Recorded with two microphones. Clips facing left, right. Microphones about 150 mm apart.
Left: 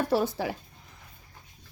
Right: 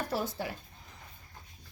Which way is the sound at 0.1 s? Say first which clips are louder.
Left 8 dB; 90° left.